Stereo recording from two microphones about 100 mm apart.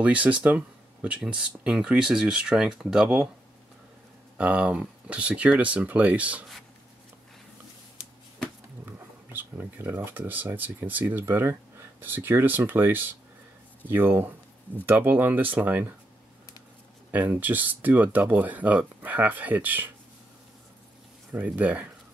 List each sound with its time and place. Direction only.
0.0 s speech: 15° right (ahead or behind)
4.4 s speech: 15° right (ahead or behind)
8.8 s speech: 20° right (ahead or behind)
17.1 s speech: 15° right (ahead or behind)
21.3 s speech: 15° right (ahead or behind)